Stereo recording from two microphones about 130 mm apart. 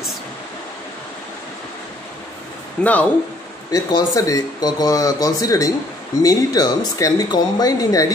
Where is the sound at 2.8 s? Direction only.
10° left (ahead or behind).